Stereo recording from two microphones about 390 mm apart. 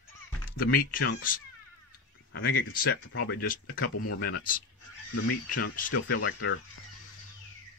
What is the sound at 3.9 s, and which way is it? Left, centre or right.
Speech, left.